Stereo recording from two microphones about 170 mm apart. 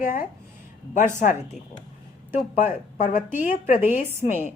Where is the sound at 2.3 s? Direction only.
45° left (ahead or behind).